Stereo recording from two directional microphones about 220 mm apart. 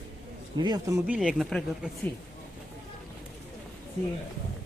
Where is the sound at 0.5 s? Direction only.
20° right (ahead or behind).